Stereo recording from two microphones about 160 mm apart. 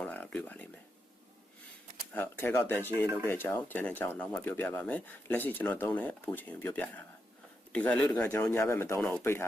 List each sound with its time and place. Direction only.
0.0 s speech: 10° left (ahead or behind)
2.1 s speech: 15° left (ahead or behind)